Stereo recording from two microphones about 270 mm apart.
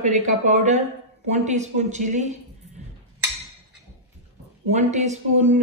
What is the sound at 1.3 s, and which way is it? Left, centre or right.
Speech, right.